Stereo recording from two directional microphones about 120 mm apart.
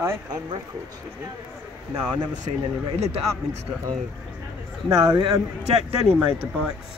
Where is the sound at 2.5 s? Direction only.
50° right (ahead or behind).